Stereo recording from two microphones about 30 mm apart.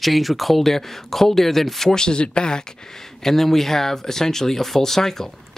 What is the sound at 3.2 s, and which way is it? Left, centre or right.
Speech, centre.